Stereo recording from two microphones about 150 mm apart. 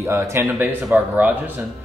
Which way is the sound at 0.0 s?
15° right (ahead or behind).